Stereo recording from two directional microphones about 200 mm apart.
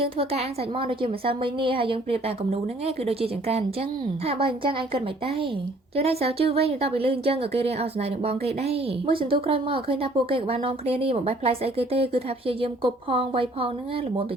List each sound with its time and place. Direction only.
0.0 s speech: 30° right (ahead or behind)